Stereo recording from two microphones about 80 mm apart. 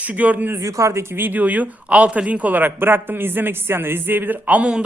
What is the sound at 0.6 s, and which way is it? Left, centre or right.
Speech, right.